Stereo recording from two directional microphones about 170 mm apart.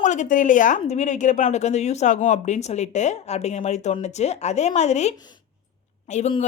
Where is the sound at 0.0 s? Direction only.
45° left (ahead or behind).